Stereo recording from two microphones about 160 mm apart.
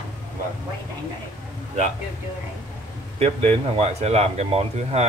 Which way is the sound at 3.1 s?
45° right (ahead or behind).